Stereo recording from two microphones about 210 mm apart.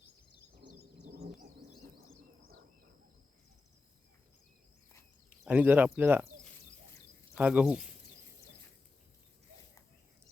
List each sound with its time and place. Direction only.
1.1 s bird: 45° right (ahead or behind)
5.5 s speech: 5° right (ahead or behind)
7.3 s speech: 5° right (ahead or behind)